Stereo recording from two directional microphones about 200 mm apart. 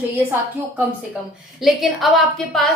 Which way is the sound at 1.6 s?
Centre (ahead or behind).